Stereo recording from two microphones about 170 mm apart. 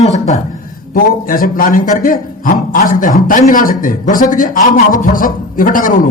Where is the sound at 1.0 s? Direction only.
55° left (ahead or behind).